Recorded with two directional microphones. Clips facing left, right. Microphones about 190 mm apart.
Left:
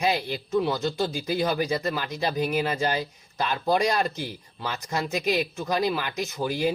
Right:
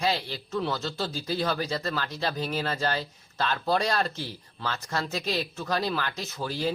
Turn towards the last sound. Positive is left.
turn(degrees=15)  # may be behind; listen again after turning